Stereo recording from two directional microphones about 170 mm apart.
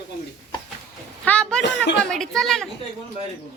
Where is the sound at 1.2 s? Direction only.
5° left (ahead or behind).